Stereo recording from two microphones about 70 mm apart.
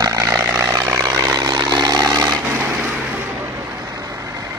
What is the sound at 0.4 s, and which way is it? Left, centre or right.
Vehicle, right.